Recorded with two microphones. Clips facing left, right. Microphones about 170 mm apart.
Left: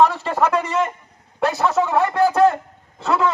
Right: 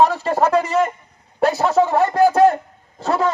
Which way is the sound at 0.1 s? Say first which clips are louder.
Right 3 dB; 40° right (ahead or behind).